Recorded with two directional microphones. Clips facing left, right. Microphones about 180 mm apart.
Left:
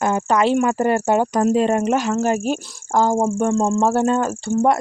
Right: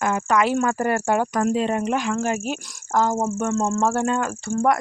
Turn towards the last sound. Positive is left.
turn(degrees=25)  # may be behind; listen again after turning